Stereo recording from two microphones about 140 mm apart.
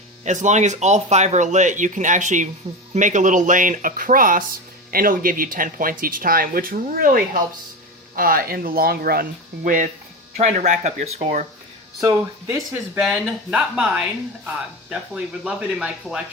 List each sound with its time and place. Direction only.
0.3 s speech: 60° right (ahead or behind); by 4.4 s 80° right
4.9 s speech: 90° right
9.6 s speech: 75° right (ahead or behind)
10.3 s speech: 55° right (ahead or behind)
11.9 s speech: 20° right (ahead or behind)
13.0 s speech: 5° right (ahead or behind)